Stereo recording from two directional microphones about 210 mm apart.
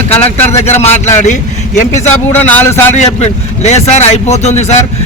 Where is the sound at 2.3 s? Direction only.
10° left (ahead or behind).